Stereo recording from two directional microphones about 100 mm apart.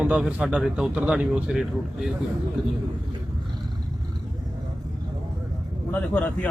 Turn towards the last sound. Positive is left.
turn(degrees=15)  # may be behind; listen again after turning